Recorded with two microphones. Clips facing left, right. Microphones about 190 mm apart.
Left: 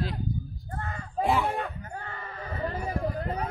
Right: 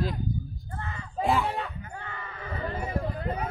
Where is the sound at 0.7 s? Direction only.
45° left (ahead or behind).